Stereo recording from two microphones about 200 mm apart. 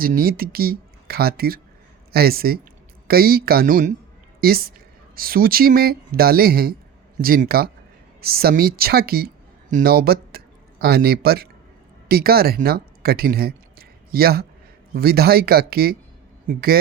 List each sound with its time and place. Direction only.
0.0 s a woman's voice: 45° right (ahead or behind)